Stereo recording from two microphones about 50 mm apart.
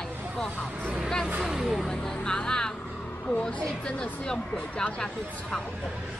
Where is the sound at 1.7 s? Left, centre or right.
Centre.